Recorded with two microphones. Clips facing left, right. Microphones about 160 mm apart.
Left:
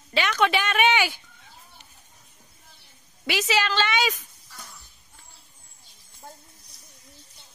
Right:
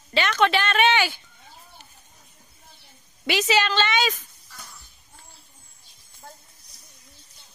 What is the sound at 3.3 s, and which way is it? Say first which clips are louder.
Speech: right 3 dB; 5° left (ahead or behind).